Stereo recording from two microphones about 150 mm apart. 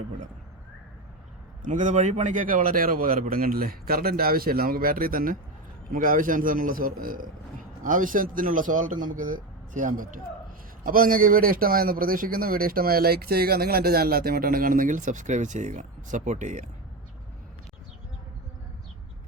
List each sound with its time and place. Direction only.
1.6 s a man's voice: 55° right (ahead or behind)